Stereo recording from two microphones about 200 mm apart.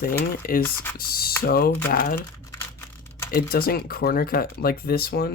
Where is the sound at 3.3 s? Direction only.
50° left (ahead or behind).